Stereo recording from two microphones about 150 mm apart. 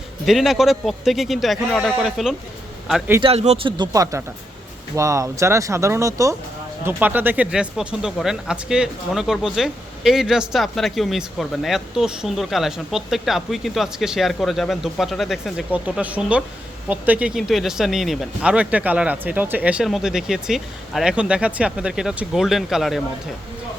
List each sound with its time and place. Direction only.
0.3 s speech: centre (ahead or behind)
3.2 s speech: 40° right (ahead or behind)
3.9 s speech: 20° right (ahead or behind); by 23.0 s centre (ahead or behind)